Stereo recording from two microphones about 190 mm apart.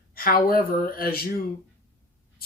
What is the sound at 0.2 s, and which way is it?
Speech, 50° left (ahead or behind).